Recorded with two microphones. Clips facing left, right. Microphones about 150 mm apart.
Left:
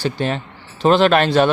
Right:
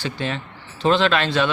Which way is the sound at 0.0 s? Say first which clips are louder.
Left 5 dB; 45° left (ahead or behind).